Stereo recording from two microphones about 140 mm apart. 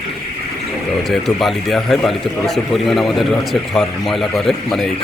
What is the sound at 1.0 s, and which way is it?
Speech, centre (ahead or behind).